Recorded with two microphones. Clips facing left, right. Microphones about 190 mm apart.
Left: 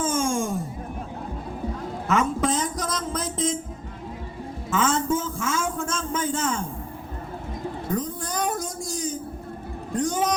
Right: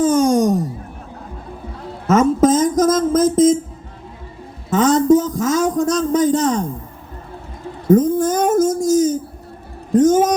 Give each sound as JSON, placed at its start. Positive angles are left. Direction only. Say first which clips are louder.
{"t": 0.0, "sound": "a sound", "louder": "right 11 dB", "side_deg": -40}
{"t": 2.0, "sound": "a man's voice", "louder": "right 11 dB", "side_deg": -40}
{"t": 4.7, "sound": "a man's voice", "louder": "right 11 dB", "side_deg": -40}
{"t": 7.9, "sound": "a man's voice", "louder": "right 18 dB", "side_deg": -45}